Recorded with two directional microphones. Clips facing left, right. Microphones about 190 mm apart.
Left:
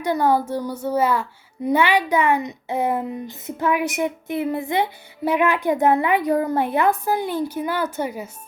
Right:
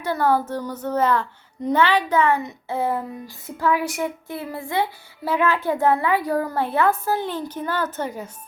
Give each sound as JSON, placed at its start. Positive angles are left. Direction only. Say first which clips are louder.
{"t": 0.0, "sound": "speech", "louder": "left 2 dB", "side_deg": 15}